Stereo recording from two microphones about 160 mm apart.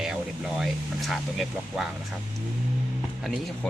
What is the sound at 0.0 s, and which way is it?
Speech, 5° right (ahead or behind).